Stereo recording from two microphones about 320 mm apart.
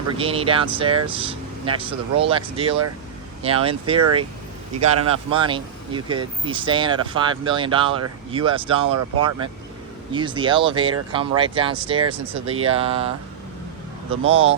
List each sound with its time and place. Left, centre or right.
0.2 s speech: centre
5.0 s speech: centre
8.9 s speech: right
10.1 s speech: centre